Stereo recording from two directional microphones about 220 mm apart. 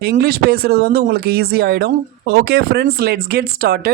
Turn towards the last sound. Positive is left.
turn(degrees=-45)  # may be behind; listen again after turning